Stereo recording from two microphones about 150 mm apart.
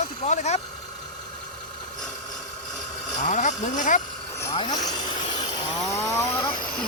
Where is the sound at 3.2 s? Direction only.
55° left (ahead or behind).